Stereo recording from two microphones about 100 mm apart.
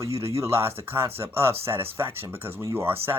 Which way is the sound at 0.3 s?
25° right (ahead or behind).